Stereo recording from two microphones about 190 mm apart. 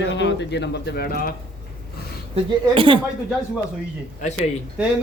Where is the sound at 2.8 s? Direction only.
25° right (ahead or behind).